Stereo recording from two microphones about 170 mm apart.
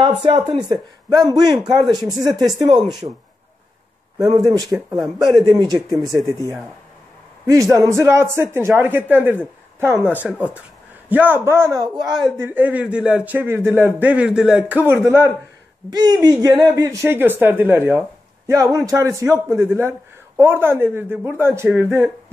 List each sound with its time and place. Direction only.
0.0 s speech: 25° right (ahead or behind)
4.2 s speech: 20° right (ahead or behind)
4.7 s speech: 5° right (ahead or behind)
5.6 s a man's voice: 25° right (ahead or behind)
12.4 s a man's voice: 10° right (ahead or behind)
21.6 s speech: centre (ahead or behind)